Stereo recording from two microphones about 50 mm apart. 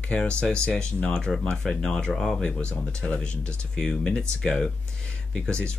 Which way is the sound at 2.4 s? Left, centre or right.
Left.